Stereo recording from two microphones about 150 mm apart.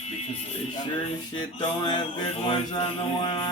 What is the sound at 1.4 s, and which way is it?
Speech, 30° left (ahead or behind).